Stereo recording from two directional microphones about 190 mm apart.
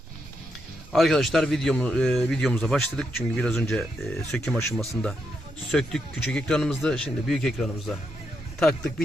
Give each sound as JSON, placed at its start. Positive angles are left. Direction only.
{"t": 0.9, "sound": "speech", "side_deg": 0}